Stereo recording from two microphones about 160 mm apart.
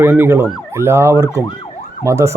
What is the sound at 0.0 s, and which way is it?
Speech, 15° right (ahead or behind).